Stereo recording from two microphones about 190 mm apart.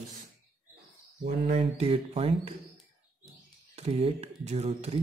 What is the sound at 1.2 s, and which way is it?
Speech, 35° right (ahead or behind).